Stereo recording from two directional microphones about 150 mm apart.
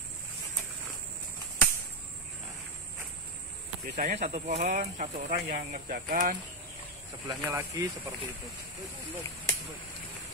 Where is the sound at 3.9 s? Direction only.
60° right (ahead or behind).